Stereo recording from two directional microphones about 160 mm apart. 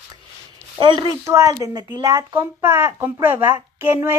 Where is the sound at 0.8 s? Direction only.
25° right (ahead or behind).